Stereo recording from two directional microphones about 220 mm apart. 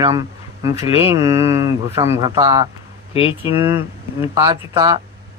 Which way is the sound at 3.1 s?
25° left (ahead or behind).